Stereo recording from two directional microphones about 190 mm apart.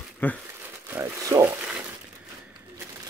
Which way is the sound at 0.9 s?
15° right (ahead or behind).